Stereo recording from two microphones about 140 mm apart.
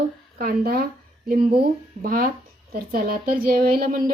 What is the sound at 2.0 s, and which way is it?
A woman's voice, 90° right.